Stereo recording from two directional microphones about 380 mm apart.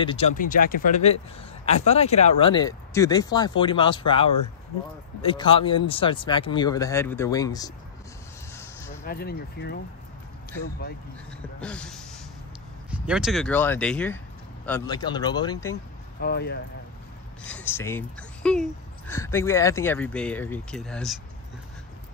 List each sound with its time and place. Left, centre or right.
0.0 s speech: centre
8.5 s a sound: centre
9.0 s speech: left
11.6 s speech: centre
15.7 s speech: left
17.4 s speech: centre